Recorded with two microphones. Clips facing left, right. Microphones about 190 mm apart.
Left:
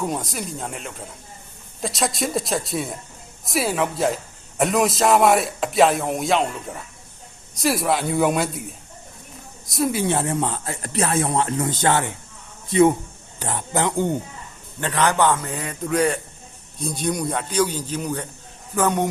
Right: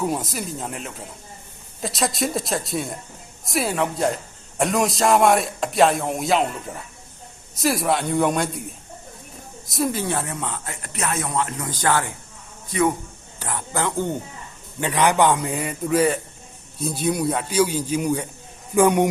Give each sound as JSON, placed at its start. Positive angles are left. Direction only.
{"t": 0.0, "sound": "a man's voice", "side_deg": -5}
{"t": 10.1, "sound": "a man's voice", "side_deg": 25}
{"t": 14.8, "sound": "a man's voice", "side_deg": -10}